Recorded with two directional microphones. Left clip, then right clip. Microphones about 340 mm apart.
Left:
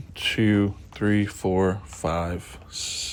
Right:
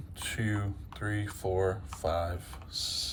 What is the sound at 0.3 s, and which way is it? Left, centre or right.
Speech, left.